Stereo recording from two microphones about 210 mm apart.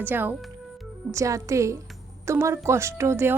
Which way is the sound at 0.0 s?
10° right (ahead or behind).